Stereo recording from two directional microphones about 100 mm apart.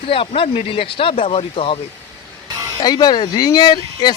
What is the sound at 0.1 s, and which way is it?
Speech, 65° left (ahead or behind).